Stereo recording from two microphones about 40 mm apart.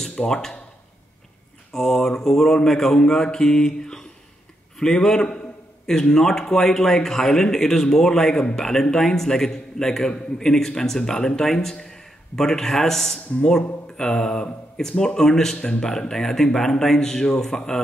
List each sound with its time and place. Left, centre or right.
0.3 s a man's voice: centre
1.7 s a man's voice: centre